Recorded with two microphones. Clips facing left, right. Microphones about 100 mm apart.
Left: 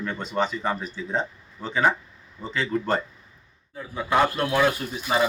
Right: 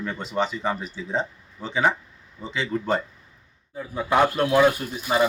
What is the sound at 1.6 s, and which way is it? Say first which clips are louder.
Speech: even; centre (ahead or behind).